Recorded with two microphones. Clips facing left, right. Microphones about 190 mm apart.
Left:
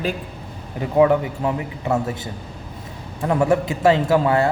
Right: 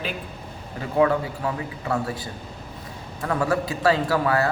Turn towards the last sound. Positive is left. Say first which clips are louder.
# left 4 dB
turn(degrees=25)  # may be behind; listen again after turning